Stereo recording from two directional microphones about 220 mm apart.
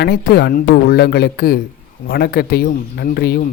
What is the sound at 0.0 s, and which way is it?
Speech, 45° left (ahead or behind).